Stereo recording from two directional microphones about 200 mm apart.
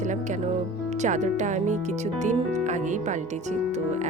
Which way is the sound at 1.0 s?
35° right (ahead or behind).